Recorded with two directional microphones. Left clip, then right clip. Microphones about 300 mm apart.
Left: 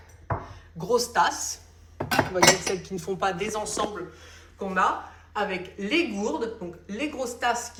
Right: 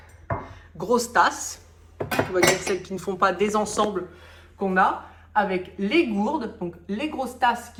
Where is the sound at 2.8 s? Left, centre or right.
Centre.